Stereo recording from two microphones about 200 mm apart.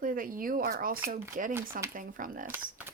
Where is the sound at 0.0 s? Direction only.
45° right (ahead or behind).